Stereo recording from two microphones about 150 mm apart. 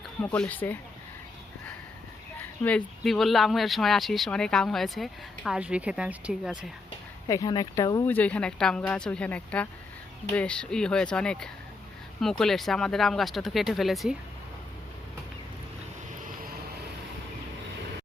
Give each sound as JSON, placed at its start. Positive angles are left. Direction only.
{"t": 0.2, "sound": "a woman's voice", "side_deg": 10}
{"t": 2.6, "sound": "speech", "side_deg": 5}
{"t": 7.3, "sound": "speech", "side_deg": 25}
{"t": 8.0, "sound": "a woman's voice", "side_deg": 10}